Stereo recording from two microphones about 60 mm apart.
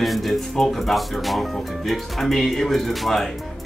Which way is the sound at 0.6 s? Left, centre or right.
Centre.